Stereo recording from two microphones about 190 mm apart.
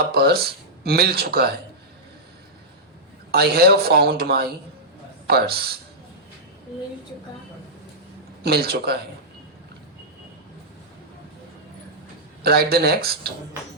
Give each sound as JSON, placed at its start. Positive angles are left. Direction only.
{"t": 0.1, "sound": "speech", "side_deg": -55}
{"t": 3.3, "sound": "speech", "side_deg": -55}
{"t": 8.4, "sound": "speech", "side_deg": -55}
{"t": 12.4, "sound": "speech", "side_deg": -55}